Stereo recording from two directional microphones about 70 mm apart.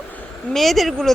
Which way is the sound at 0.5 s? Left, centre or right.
Centre.